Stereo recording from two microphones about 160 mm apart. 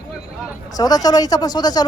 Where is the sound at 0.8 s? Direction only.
25° left (ahead or behind).